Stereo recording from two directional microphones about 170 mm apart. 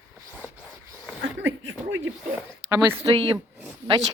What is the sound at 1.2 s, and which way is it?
Speech, 90° right.